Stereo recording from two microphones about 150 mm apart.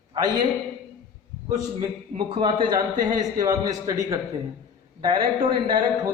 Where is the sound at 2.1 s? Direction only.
35° right (ahead or behind).